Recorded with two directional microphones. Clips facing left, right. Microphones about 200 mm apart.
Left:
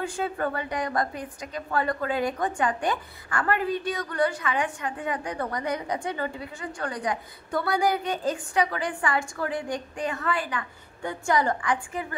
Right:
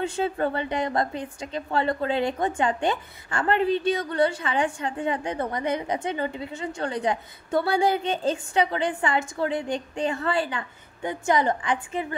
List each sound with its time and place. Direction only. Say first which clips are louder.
0.0 s a woman's voice: right 3 dB; 25° right (ahead or behind)